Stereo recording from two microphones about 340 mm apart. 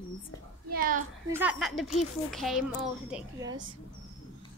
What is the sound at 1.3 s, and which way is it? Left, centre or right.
A child's voice, centre.